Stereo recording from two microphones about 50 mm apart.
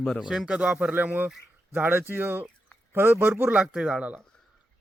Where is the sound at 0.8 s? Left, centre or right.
Right.